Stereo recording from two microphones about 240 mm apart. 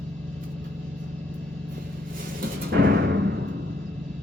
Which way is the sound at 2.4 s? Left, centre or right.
Right.